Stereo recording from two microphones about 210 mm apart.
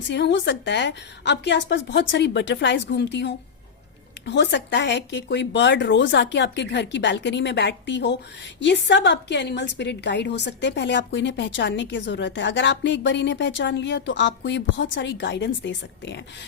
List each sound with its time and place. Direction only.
0.1 s a woman's voice: 55° left (ahead or behind)